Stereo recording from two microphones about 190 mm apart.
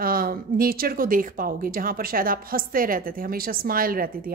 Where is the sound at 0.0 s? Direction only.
50° right (ahead or behind).